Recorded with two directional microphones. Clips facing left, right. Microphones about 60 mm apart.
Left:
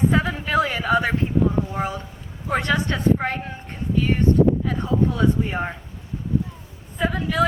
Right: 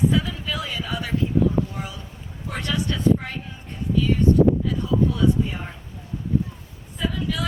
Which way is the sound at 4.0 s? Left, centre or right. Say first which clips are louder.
Even; left.